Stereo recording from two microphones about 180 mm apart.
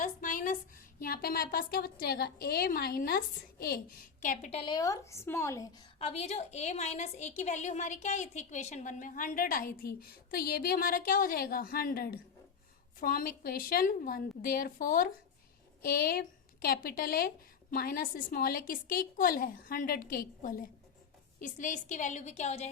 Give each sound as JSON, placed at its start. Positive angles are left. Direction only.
{"t": 0.0, "sound": "a woman's voice", "side_deg": 50}
{"t": 4.2, "sound": "a woman's voice", "side_deg": 40}
{"t": 4.6, "sound": "a woman's voice", "side_deg": 20}
{"t": 6.0, "sound": "a woman's voice", "side_deg": 35}